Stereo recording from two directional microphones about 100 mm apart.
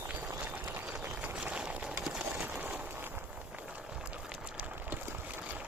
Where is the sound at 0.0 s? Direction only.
15° right (ahead or behind).